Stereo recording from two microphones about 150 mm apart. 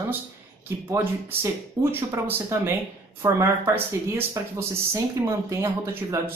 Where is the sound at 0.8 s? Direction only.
15° right (ahead or behind).